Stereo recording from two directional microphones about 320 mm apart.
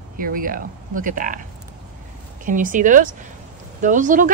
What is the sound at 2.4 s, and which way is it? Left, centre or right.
A woman's voice, right.